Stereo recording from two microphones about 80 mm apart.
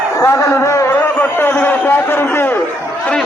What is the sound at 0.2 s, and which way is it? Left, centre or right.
Speech, left.